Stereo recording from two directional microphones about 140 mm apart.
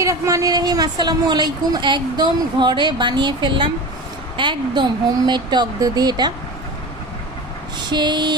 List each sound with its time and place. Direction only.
0.0 s speech: 20° right (ahead or behind)
7.8 s speech: 30° right (ahead or behind)